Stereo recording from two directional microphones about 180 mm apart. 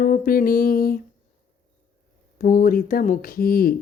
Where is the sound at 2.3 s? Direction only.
50° left (ahead or behind).